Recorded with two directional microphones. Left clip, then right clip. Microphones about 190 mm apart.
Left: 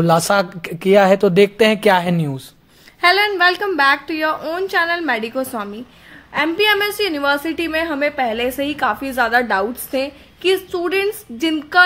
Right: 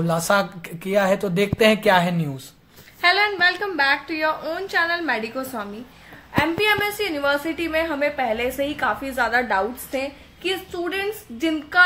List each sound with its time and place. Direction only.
0.0 s a woman's voice: 45° left (ahead or behind)
2.1 s a woman's voice: 35° left (ahead or behind)
3.0 s a woman's voice: 50° left (ahead or behind)